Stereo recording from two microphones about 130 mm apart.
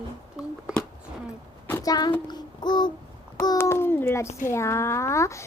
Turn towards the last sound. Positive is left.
turn(degrees=20)  # may be behind; listen again after turning